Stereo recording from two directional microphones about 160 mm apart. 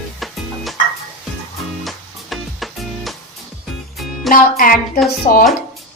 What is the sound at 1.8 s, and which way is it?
Music, centre (ahead or behind).